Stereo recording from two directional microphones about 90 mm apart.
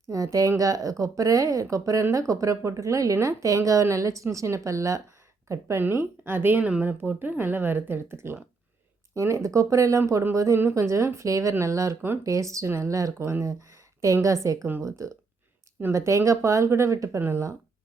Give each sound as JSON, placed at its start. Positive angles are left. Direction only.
{"t": 0.1, "sound": "a woman's voice", "side_deg": -40}